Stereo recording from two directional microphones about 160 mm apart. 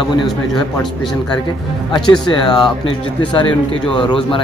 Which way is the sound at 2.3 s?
30° left (ahead or behind).